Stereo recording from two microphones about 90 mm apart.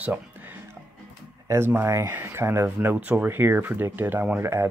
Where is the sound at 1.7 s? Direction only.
25° right (ahead or behind).